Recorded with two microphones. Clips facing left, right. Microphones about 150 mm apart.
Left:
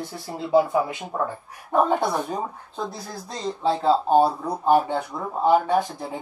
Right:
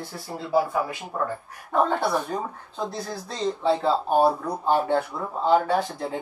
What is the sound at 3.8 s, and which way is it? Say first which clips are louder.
Speech: left 4 dB; 25° left (ahead or behind).